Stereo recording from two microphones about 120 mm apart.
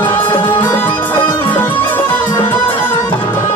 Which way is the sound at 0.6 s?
15° left (ahead or behind).